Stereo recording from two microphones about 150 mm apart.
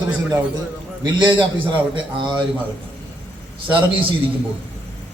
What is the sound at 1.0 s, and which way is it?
A man's voice, 30° right (ahead or behind).